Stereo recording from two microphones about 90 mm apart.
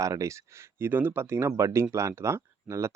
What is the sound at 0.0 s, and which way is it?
Speech, 35° right (ahead or behind).